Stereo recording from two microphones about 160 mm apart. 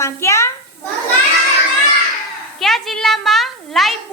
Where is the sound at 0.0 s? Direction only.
15° left (ahead or behind).